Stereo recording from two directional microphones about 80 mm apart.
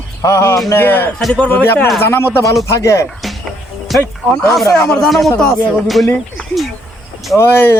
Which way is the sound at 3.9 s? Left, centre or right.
Centre.